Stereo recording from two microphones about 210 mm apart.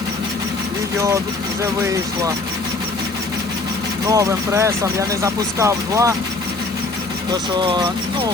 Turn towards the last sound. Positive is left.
turn(degrees=-20)  # may be behind; listen again after turning